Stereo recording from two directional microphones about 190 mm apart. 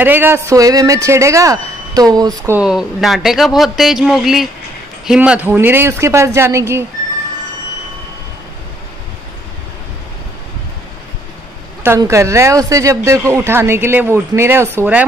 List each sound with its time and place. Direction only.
0.0 s speech: 10° right (ahead or behind)
2.6 s speech: 5° right (ahead or behind)
11.8 s speech: 15° right (ahead or behind)